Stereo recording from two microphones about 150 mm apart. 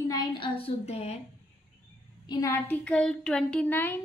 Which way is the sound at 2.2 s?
25° left (ahead or behind).